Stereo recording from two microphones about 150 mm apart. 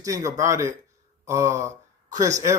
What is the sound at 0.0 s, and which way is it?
Speech, 20° right (ahead or behind).